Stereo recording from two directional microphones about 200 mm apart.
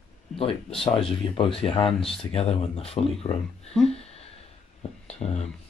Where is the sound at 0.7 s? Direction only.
25° left (ahead or behind).